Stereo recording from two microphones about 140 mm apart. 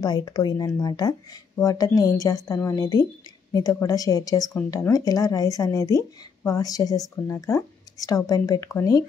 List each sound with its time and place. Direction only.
0.0 s speech: 30° left (ahead or behind)